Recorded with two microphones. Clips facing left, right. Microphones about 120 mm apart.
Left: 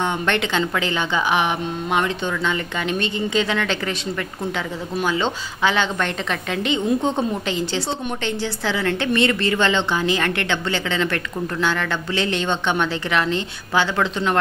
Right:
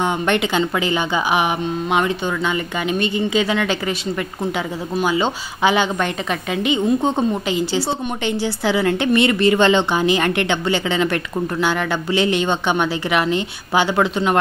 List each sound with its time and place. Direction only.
0.0 s a woman's voice: 10° right (ahead or behind)
5.0 s a woman's voice: 10° right (ahead or behind)